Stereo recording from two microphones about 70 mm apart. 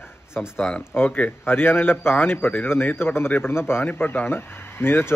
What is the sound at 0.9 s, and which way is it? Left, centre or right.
A man's voice, left.